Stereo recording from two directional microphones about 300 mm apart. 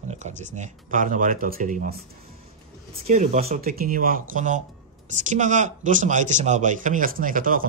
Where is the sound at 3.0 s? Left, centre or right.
Right.